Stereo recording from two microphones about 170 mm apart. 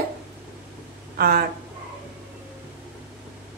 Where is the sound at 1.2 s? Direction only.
60° right (ahead or behind).